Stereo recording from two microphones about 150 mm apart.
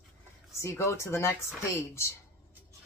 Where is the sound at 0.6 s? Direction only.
20° left (ahead or behind).